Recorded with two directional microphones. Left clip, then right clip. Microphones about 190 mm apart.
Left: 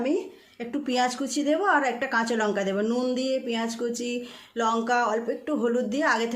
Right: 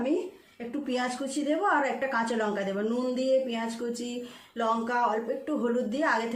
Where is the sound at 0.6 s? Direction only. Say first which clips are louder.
Left 5 dB; 55° left (ahead or behind).